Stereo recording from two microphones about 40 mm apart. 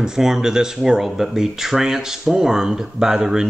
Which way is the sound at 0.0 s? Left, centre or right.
Centre.